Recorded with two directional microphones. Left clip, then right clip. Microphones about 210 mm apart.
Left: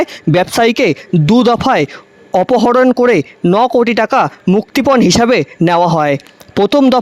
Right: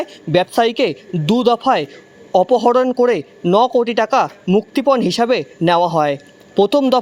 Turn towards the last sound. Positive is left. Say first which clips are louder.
# left 3 dB
turn(degrees=50)  # may be behind; listen again after turning